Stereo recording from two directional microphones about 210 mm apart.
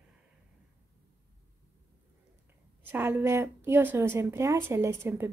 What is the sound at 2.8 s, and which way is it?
A woman's voice, 10° right (ahead or behind).